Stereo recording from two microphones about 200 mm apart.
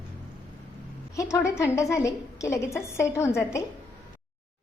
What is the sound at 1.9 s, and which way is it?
A woman's voice, 15° left (ahead or behind).